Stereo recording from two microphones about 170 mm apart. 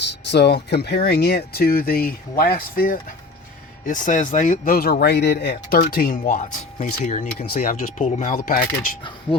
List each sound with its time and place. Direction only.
0.3 s speech: 80° left; by 7.3 s 45° left (ahead or behind)
7.3 s speech: 60° left (ahead or behind)